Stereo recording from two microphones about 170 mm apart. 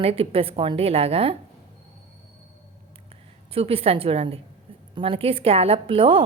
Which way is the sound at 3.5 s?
35° right (ahead or behind).